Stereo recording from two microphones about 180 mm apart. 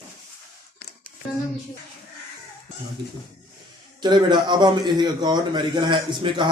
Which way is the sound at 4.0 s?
25° right (ahead or behind).